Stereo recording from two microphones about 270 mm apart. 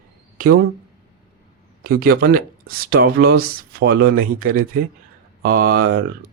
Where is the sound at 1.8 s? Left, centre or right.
Right.